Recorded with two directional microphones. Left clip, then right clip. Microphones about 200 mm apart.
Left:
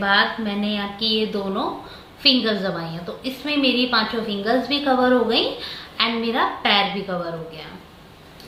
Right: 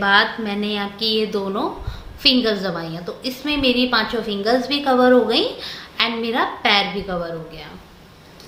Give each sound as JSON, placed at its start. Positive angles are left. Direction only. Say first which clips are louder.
{"t": 0.0, "sound": "a woman's voice", "louder": "right 2 dB", "side_deg": -45}